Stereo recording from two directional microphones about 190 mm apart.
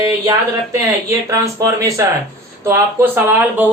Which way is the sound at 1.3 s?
15° right (ahead or behind).